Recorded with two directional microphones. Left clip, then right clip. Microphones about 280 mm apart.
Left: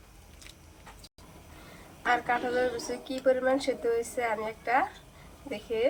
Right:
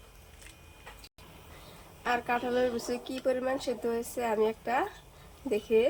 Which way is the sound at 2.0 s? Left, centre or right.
Right.